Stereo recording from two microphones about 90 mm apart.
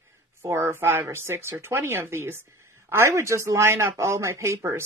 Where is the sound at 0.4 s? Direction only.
25° right (ahead or behind).